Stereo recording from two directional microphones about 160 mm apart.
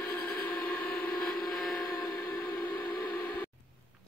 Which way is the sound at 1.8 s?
20° left (ahead or behind).